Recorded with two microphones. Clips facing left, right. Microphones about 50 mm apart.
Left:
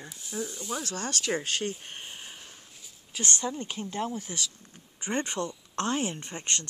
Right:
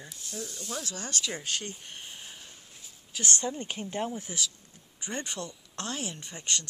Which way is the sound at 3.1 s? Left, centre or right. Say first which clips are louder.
Even; left.